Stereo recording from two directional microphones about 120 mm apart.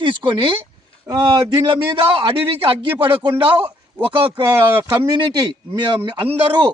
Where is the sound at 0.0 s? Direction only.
45° right (ahead or behind).